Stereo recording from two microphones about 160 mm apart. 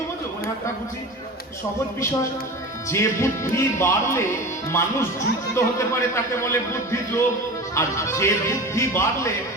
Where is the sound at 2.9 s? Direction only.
15° left (ahead or behind).